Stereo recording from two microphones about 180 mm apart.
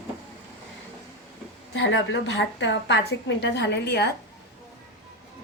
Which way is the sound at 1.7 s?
90° left.